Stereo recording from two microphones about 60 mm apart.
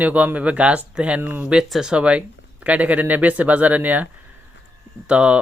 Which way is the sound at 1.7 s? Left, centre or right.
Centre.